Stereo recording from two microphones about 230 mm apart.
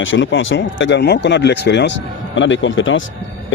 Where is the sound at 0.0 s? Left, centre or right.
Left.